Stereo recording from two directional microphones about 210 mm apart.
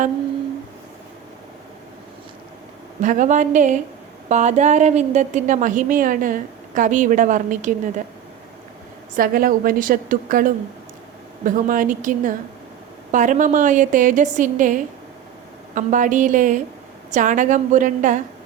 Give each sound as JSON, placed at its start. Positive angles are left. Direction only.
{"t": 3.0, "sound": "a woman's voice", "side_deg": -35}
{"t": 9.1, "sound": "a woman's voice", "side_deg": -40}